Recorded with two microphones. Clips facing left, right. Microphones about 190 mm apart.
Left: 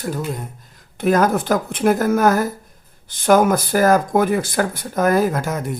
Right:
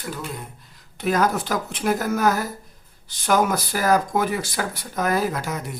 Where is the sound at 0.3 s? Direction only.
45° left (ahead or behind).